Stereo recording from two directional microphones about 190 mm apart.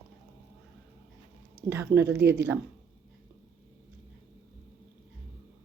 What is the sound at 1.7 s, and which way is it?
Speech, 15° right (ahead or behind).